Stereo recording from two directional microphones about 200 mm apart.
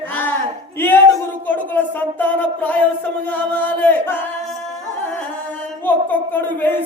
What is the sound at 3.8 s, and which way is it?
Speech, 10° left (ahead or behind).